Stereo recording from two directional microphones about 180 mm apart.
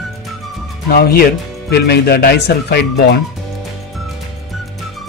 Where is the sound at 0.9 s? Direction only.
55° left (ahead or behind).